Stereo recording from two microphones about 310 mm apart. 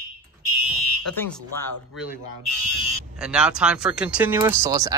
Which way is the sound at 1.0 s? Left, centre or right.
Centre.